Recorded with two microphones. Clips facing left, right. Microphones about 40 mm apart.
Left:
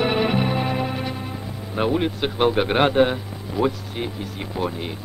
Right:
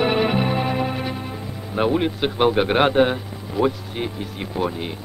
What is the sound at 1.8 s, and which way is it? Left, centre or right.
A man's voice, centre.